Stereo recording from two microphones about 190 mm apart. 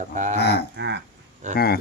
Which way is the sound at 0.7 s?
65° right (ahead or behind).